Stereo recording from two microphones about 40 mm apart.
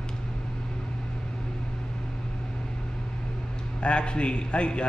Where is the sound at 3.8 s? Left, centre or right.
Left.